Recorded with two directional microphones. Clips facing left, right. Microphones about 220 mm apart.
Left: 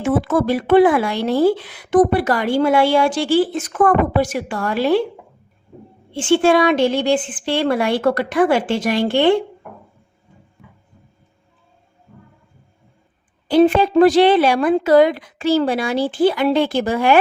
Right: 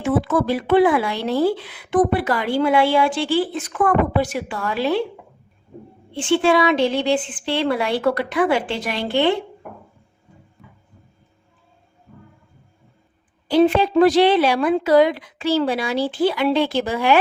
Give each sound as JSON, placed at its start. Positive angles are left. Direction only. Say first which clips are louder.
{"t": 0.0, "sound": "a woman's voice", "louder": "left 2 dB", "side_deg": 50}
{"t": 6.2, "sound": "a woman's voice", "louder": "left 3 dB", "side_deg": 50}
{"t": 13.5, "sound": "a woman's voice", "louder": "left 2 dB", "side_deg": 50}